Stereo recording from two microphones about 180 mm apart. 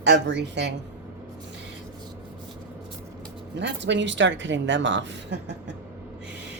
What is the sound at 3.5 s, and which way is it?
Speech, 80° right.